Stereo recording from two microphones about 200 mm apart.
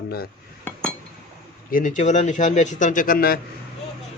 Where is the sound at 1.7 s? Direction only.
40° left (ahead or behind).